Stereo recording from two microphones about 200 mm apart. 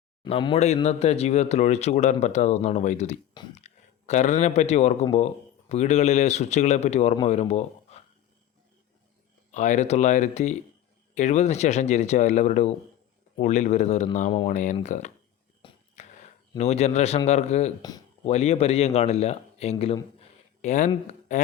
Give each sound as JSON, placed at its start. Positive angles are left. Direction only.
{"t": 0.2, "sound": "speech", "side_deg": 25}
{"t": 9.5, "sound": "speech", "side_deg": 35}
{"t": 15.6, "sound": "wheeze", "side_deg": 25}
{"t": 16.6, "sound": "speech", "side_deg": 35}
{"t": 20.1, "sound": "a sound", "side_deg": 35}